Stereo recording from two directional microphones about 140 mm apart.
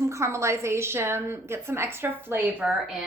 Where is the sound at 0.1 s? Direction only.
20° right (ahead or behind); by 3.1 s 5° right (ahead or behind).